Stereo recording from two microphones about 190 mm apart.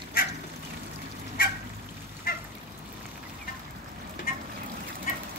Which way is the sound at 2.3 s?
50° left (ahead or behind).